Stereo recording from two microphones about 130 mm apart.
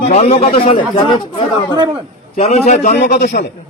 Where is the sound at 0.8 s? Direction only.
40° left (ahead or behind).